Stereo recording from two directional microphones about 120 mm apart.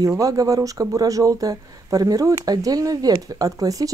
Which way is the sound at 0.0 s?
30° right (ahead or behind).